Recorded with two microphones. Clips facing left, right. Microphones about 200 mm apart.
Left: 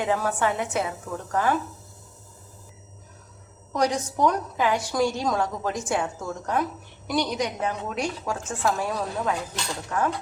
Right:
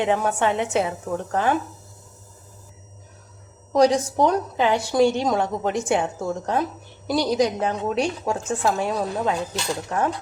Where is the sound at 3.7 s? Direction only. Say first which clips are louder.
Right 7 dB; 35° right (ahead or behind).